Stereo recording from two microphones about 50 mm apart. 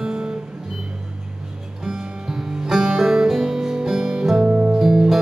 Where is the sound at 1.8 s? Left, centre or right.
Centre.